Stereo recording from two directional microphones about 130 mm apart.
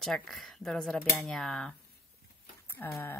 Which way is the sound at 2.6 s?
15° left (ahead or behind).